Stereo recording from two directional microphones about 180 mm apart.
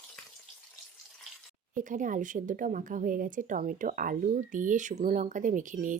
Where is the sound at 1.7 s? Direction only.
45° right (ahead or behind).